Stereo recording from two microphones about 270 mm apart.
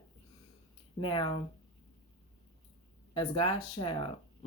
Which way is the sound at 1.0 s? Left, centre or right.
Centre.